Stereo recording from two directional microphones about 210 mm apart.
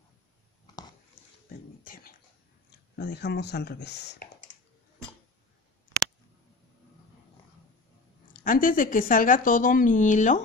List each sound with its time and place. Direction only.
3.0 s speech: 50° left (ahead or behind)
8.3 s speech: 40° left (ahead or behind)